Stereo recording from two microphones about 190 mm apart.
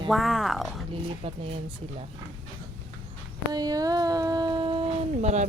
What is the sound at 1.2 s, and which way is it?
Speech, 30° right (ahead or behind).